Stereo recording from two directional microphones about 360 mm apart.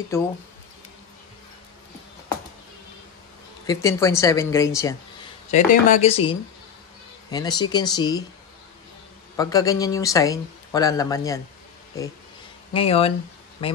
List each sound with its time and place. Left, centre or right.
0.1 s speech: centre
3.6 s speech: centre
5.5 s speech: left
9.4 s speech: centre
12.7 s speech: centre